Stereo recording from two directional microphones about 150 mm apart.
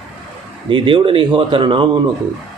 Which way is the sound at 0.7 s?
35° right (ahead or behind).